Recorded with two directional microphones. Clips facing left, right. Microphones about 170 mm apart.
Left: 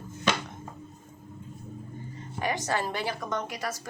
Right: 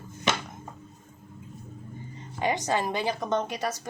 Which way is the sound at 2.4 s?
20° right (ahead or behind).